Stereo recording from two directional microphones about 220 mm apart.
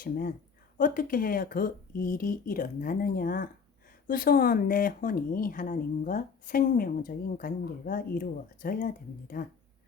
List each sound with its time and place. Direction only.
0.0 s speech: 40° left (ahead or behind)